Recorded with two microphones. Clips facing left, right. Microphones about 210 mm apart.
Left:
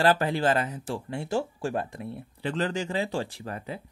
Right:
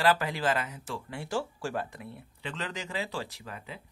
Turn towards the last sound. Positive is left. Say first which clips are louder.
# left 7 dB
turn(degrees=45)  # may be behind; listen again after turning